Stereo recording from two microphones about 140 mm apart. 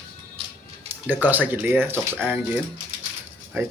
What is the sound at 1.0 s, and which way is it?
Speech, 15° right (ahead or behind).